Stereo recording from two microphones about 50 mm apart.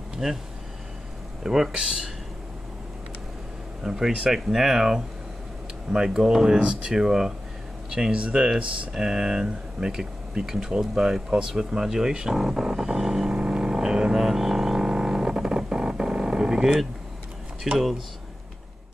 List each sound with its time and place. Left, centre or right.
0.1 s a sound: centre
1.4 s speech: centre
3.8 s speech: centre
6.0 s speech: centre
12.4 s a sound: centre
13.4 s vehicle: centre
17.7 s speech: centre